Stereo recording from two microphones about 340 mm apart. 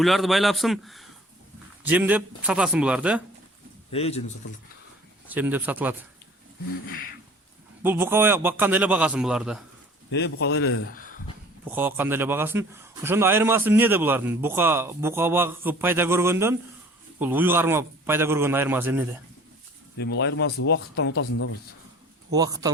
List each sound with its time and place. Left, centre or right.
0.0 s a man's voice: centre
3.9 s speech: centre
5.3 s a man's voice: centre
7.8 s a man's voice: centre
10.1 s speech: left
11.6 s a man's voice: centre
20.0 s speech: left
22.3 s a man's voice: centre